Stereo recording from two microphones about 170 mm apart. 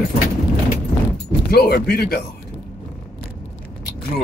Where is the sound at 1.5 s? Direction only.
65° left (ahead or behind).